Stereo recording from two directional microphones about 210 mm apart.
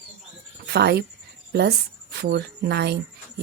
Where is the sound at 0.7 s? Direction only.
50° right (ahead or behind).